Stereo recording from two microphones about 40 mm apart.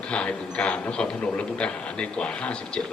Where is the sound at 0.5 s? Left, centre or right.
Left.